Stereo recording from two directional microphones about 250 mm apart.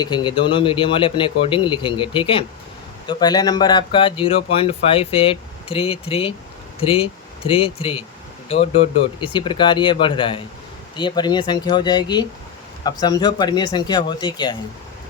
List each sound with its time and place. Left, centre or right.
0.0 s speech: centre